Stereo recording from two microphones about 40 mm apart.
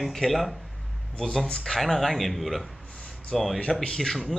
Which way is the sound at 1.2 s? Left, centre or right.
Centre.